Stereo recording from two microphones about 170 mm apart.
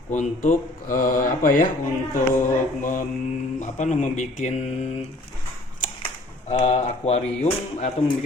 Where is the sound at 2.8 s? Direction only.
50° left (ahead or behind).